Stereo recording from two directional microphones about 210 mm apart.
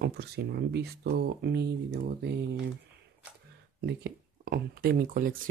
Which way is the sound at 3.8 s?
55° right (ahead or behind).